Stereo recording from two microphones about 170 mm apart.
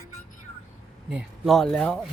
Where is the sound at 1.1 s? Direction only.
Centre (ahead or behind).